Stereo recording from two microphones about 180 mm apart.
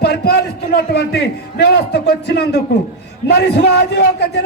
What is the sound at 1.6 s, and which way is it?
A man's voice, 65° left (ahead or behind).